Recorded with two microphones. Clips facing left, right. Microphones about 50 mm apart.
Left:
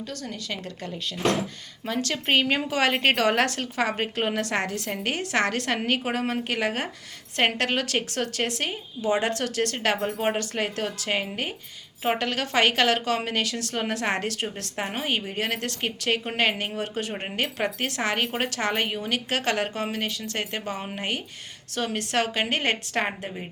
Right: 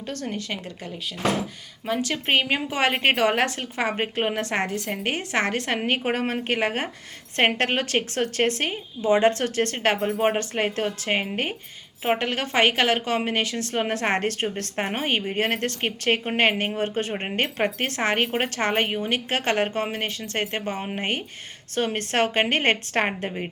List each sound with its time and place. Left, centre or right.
0.1 s a woman's voice: right
1.8 s a woman's voice: centre; by 11.5 s right
12.0 s a woman's voice: right